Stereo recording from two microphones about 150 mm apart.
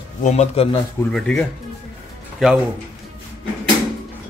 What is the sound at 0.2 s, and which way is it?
Speech, 50° left (ahead or behind).